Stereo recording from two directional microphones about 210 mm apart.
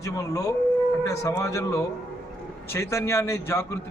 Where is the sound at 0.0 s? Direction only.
15° left (ahead or behind).